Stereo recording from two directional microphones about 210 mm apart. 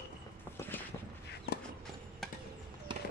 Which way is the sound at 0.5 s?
10° left (ahead or behind).